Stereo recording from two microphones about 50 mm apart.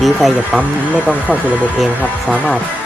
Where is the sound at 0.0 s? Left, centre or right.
Centre.